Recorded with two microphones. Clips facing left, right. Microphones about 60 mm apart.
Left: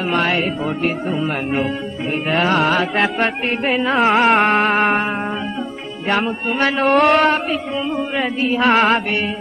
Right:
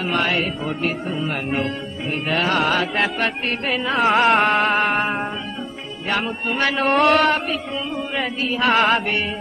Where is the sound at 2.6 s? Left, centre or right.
Centre.